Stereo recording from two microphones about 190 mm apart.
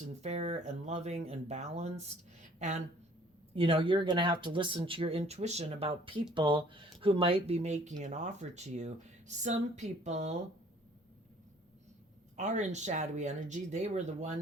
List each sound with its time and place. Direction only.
0.2 s speech: 35° right (ahead or behind)
12.4 s speech: 40° right (ahead or behind)